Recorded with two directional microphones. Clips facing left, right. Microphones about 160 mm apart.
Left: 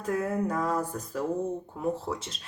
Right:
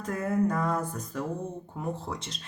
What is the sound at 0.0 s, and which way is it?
Speech, 10° left (ahead or behind).